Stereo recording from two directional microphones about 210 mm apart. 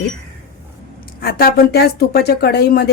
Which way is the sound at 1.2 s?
45° left (ahead or behind).